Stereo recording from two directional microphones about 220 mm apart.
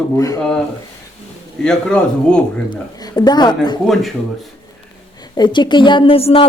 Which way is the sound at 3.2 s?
20° left (ahead or behind).